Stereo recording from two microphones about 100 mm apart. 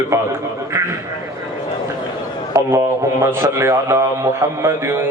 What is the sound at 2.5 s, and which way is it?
Mantra, 30° right (ahead or behind).